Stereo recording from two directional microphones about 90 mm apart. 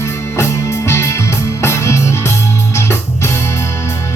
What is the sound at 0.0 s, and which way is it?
Music, 30° left (ahead or behind).